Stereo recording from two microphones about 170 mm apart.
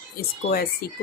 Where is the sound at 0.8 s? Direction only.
60° left (ahead or behind).